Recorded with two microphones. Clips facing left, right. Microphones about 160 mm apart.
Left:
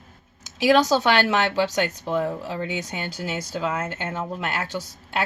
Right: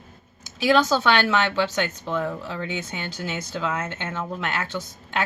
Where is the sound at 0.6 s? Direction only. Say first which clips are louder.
Left 2 dB; 15° left (ahead or behind).